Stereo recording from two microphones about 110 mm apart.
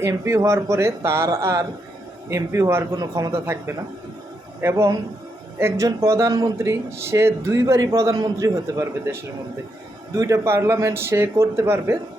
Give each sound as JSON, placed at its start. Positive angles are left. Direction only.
{"t": 0.0, "sound": "speech", "side_deg": -25}
{"t": 10.2, "sound": "speech", "side_deg": -25}